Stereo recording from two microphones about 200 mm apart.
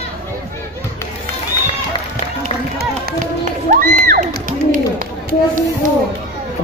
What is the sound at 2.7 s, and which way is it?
Music, 45° right (ahead or behind).